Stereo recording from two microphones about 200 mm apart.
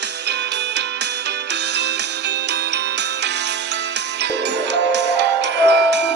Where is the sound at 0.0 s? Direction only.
60° right (ahead or behind).